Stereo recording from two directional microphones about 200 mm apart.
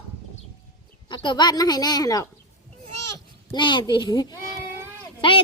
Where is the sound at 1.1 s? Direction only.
20° left (ahead or behind).